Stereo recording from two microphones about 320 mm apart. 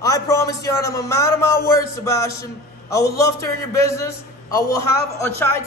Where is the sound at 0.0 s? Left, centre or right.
Centre.